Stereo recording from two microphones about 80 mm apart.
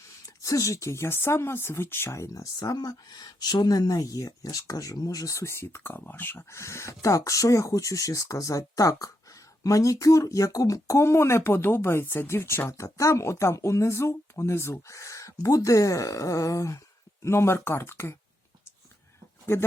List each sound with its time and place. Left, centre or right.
0.4 s speech: left
6.5 s speech: left